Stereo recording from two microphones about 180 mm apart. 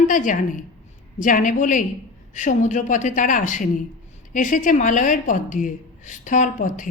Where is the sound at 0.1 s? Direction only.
45° left (ahead or behind).